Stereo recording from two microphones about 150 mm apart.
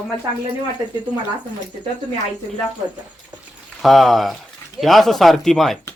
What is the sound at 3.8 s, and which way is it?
Speech, centre (ahead or behind).